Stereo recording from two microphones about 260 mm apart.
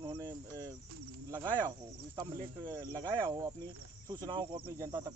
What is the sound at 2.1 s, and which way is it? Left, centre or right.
Speech, centre.